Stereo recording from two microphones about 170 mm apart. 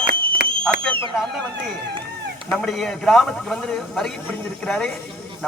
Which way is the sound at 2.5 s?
Centre (ahead or behind).